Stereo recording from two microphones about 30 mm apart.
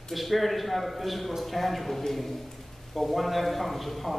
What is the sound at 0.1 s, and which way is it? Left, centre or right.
A man's voice, centre.